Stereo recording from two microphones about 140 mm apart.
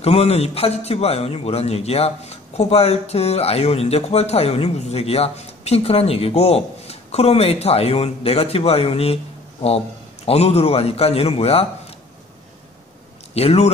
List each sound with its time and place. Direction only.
0.0 s a man's voice: 45° left (ahead or behind)
13.3 s a man's voice: 45° left (ahead or behind)